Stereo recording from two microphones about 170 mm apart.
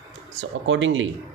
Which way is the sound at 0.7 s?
90° right.